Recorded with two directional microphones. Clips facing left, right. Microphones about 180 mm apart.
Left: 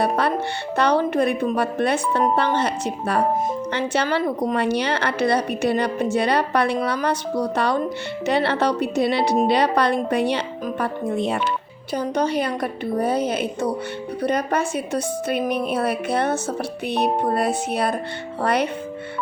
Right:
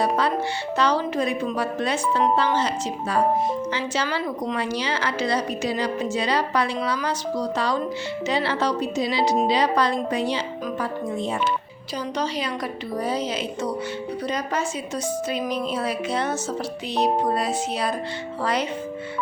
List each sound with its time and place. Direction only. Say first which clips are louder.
0.0 s music: left 2 dB; 60° left (ahead or behind)
0.8 s a woman's voice: left 4 dB; 60° left (ahead or behind)
11.9 s a woman's voice: left 5 dB; 55° left (ahead or behind)